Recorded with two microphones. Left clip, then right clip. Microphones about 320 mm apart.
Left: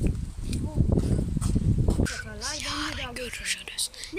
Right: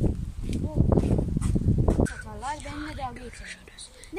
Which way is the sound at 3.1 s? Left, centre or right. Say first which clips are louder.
Left 9 dB; centre.